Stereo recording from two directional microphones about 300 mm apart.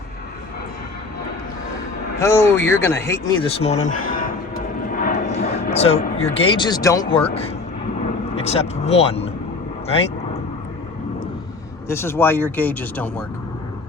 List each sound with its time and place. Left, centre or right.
2.1 s speech: centre; by 4.4 s left
4.9 s vehicle: left
5.5 s speech: left
11.9 s speech: centre